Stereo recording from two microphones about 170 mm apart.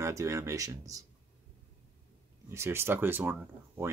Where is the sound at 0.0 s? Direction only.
15° right (ahead or behind).